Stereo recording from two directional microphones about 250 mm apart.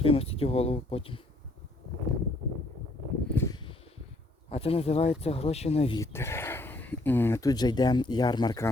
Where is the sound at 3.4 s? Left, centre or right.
Centre.